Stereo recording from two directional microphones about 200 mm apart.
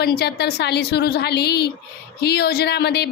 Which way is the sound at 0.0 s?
55° left (ahead or behind).